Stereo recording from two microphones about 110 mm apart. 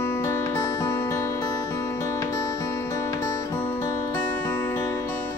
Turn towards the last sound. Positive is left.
turn(degrees=25)  # may be behind; listen again after turning